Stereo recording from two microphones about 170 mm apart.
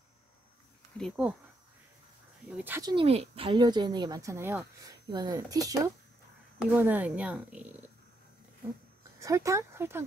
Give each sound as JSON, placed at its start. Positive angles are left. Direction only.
{"t": 1.2, "sound": "a woman's voice", "side_deg": -5}
{"t": 2.5, "sound": "a woman's voice", "side_deg": -10}
{"t": 2.8, "sound": "a woman's voice", "side_deg": -30}
{"t": 6.7, "sound": "a woman's voice", "side_deg": -10}
{"t": 9.2, "sound": "a woman's voice", "side_deg": -20}